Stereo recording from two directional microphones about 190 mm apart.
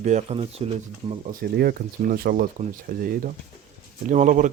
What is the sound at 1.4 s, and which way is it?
Speech, 55° right (ahead or behind).